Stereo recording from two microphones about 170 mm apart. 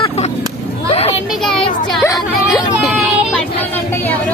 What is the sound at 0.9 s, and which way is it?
Children playing, 40° left (ahead or behind).